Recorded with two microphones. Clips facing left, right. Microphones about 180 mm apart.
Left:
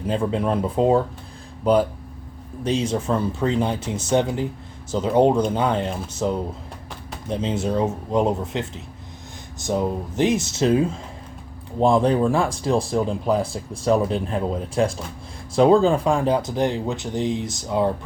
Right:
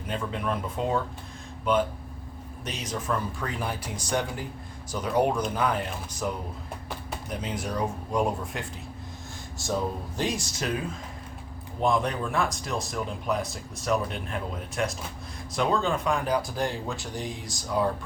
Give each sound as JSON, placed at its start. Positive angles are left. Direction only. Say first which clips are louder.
{"t": 0.1, "sound": "speech", "louder": "left 8 dB", "side_deg": 30}